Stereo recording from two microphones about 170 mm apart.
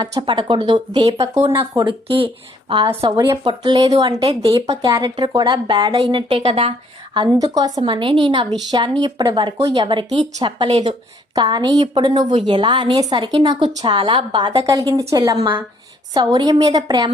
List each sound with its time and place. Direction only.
0.0 s a woman's voice: 25° right (ahead or behind)